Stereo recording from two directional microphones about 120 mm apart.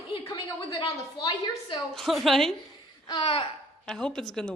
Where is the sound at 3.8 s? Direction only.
5° left (ahead or behind).